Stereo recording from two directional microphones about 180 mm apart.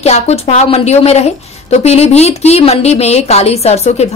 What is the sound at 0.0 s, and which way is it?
A woman's voice, 35° left (ahead or behind).